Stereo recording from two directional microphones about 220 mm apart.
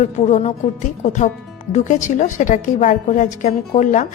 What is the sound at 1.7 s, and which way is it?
Speech, 35° left (ahead or behind).